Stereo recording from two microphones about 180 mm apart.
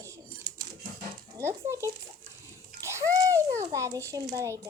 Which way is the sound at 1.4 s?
15° right (ahead or behind).